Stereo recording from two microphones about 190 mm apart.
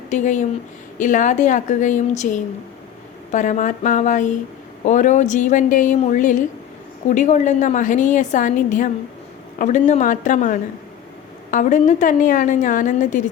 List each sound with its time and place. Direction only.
0.1 s a woman's voice: 40° left (ahead or behind)